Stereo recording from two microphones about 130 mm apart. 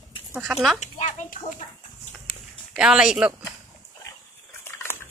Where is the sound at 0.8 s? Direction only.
75° left (ahead or behind).